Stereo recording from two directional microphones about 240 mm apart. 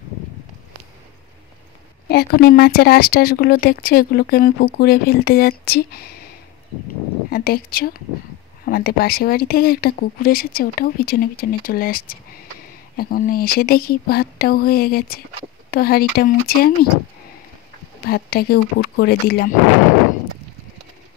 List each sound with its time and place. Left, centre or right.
2.0 s speech: left
7.2 s speech: left
18.0 s speech: left